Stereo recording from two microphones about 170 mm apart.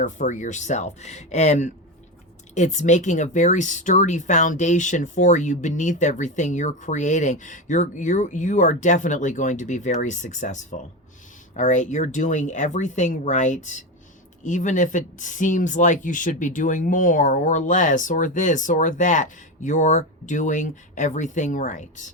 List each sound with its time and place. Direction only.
0.0 s speech: 50° left (ahead or behind)